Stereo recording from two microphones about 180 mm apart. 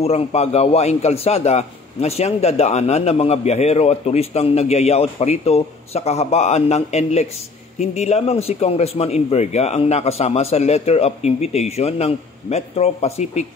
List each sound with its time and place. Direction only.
0.0 s a man's voice: 35° left (ahead or behind)